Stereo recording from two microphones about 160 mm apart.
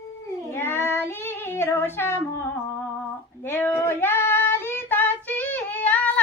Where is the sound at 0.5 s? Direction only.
15° left (ahead or behind).